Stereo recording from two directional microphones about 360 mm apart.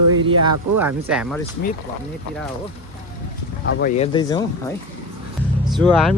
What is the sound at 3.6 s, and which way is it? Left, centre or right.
Speech, left.